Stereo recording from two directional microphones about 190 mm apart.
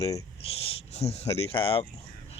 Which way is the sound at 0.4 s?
30° left (ahead or behind).